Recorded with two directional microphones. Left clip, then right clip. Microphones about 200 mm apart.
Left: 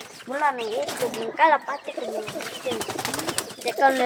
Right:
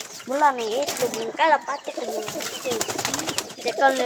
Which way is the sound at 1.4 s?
5° right (ahead or behind).